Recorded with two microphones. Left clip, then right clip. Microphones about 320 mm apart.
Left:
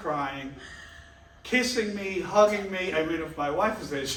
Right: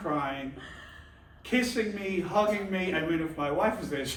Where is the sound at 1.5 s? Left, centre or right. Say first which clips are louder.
Left 3 dB; centre.